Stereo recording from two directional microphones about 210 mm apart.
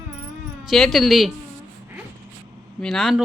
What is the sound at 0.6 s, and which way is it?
Speech, centre (ahead or behind).